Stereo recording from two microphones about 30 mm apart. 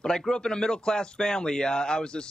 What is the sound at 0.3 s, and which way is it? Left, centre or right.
Speech, left.